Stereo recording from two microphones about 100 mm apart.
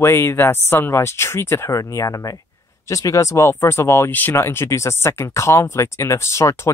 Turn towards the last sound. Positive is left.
turn(degrees=30)  # may be behind; listen again after turning